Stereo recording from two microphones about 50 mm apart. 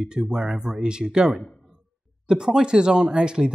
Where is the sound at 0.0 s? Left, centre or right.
Centre.